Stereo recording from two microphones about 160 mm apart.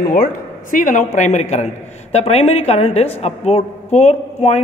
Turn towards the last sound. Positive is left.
turn(degrees=40)  # may be behind; listen again after turning